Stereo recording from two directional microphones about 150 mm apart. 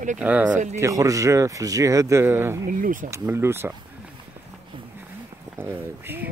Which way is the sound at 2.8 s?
65° right (ahead or behind).